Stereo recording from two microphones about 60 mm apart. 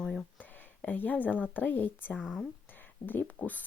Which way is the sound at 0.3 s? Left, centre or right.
Left.